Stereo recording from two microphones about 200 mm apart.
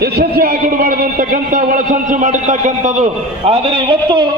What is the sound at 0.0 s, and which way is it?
A man's voice, 50° right (ahead or behind).